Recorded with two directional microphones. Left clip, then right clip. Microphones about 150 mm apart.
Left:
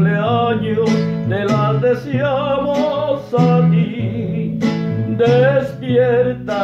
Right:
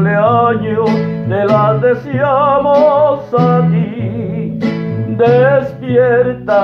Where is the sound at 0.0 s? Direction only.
30° left (ahead or behind).